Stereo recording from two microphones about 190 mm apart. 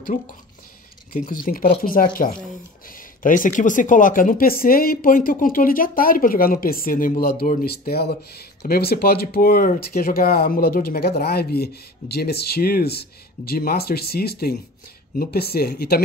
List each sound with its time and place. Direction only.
0.0 s speech: 45° left (ahead or behind)